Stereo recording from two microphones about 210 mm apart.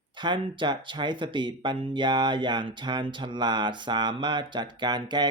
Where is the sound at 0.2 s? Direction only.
20° right (ahead or behind).